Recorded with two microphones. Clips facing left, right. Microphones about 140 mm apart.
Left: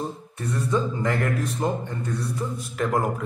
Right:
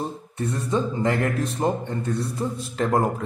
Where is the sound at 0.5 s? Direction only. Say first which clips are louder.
Left 1 dB; 25° right (ahead or behind).